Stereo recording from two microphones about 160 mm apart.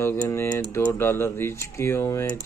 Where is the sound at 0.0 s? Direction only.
15° left (ahead or behind).